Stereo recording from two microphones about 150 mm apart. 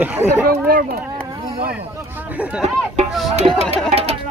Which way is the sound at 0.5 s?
80° right.